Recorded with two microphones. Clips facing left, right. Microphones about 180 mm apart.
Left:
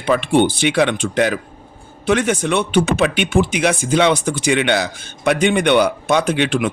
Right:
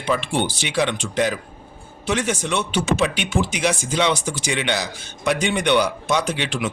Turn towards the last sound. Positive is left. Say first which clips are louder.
# left 7 dB
turn(degrees=55)  # may be behind; listen again after turning